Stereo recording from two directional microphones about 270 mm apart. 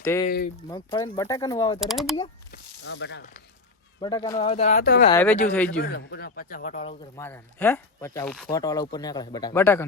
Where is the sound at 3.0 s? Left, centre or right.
Left.